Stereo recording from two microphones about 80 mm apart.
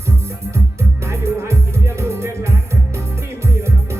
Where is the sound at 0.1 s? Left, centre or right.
Right.